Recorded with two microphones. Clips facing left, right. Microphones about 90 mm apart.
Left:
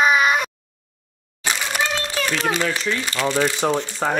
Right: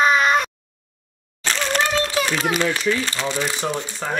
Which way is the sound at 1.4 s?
10° left (ahead or behind).